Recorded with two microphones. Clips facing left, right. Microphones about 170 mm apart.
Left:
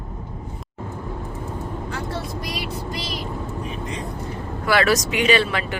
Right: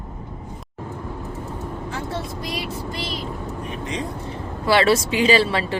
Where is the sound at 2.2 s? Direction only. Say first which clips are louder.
Right 1 dB; 25° right (ahead or behind).